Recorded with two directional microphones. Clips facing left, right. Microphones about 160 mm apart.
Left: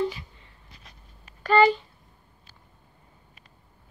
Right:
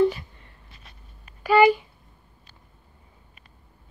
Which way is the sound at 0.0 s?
55° right (ahead or behind).